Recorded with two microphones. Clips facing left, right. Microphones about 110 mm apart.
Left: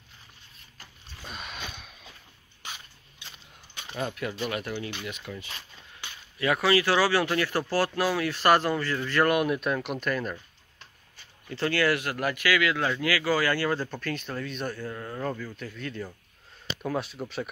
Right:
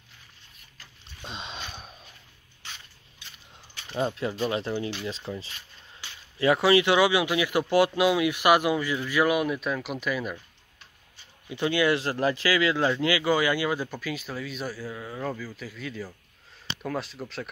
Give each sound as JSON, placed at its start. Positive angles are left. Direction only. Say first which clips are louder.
{"t": 1.2, "sound": "a sound", "louder": "right 2 dB", "side_deg": -25}
{"t": 3.9, "sound": "speech", "louder": "right 4 dB", "side_deg": -30}
{"t": 11.4, "sound": "speech", "louder": "right 1 dB", "side_deg": -15}
{"t": 12.0, "sound": "speech", "louder": "right 3 dB", "side_deg": -30}